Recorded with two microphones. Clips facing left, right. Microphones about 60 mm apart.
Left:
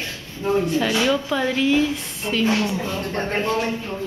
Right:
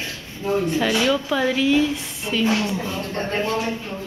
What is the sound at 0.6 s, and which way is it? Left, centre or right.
A woman's voice, centre.